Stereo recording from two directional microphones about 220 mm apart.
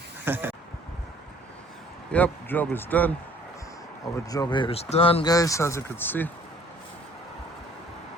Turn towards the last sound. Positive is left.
turn(degrees=10)  # may be behind; listen again after turning